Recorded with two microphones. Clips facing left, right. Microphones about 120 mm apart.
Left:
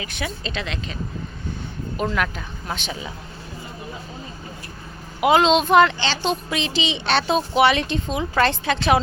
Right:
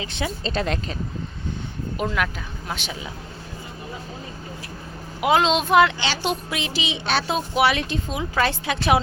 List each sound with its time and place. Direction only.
0.0 s speech: 25° right (ahead or behind)
0.5 s speech: 40° right (ahead or behind)
2.0 s a woman's voice: 5° right (ahead or behind)
5.2 s a woman's voice: centre (ahead or behind)